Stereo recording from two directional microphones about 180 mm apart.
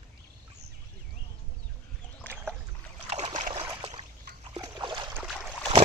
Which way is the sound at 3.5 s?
30° right (ahead or behind).